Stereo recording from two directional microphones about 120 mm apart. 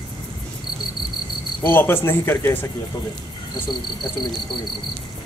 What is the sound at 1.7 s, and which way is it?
A man's voice, 20° left (ahead or behind).